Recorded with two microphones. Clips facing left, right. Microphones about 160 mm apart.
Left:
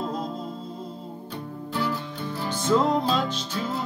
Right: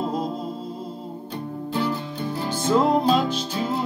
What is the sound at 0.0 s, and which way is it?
Music, 10° right (ahead or behind).